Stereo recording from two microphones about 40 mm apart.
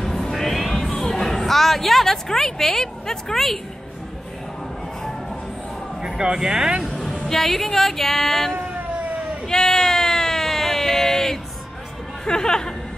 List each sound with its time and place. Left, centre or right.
0.0 s music: centre
2.2 s a woman's voice: centre
6.2 s speech: centre
7.0 s speech: centre
9.5 s a sound: centre
12.3 s a woman's voice: centre